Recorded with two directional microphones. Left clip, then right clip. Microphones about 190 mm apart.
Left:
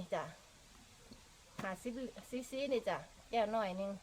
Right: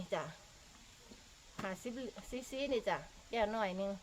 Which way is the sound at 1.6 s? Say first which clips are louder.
Even; 15° right (ahead or behind).